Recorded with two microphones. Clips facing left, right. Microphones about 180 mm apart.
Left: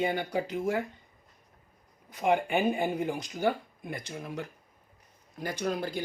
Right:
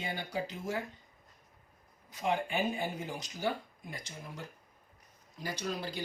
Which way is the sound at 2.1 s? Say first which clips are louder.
Left 6 dB; 55° left (ahead or behind).